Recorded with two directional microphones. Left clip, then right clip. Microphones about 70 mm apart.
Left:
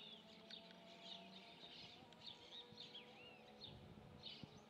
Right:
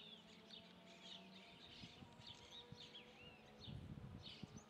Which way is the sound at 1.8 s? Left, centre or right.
Right.